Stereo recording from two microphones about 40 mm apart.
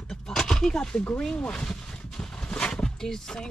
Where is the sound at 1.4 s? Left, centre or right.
Left.